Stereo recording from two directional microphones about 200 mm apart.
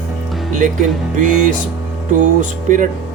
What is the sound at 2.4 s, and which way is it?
Speech, 40° right (ahead or behind).